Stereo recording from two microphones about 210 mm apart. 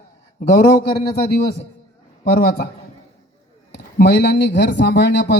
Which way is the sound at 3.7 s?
55° left (ahead or behind).